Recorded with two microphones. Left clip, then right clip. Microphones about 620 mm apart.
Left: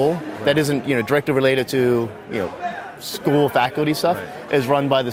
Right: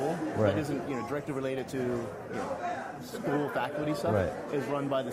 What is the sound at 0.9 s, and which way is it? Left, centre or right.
Speech, left.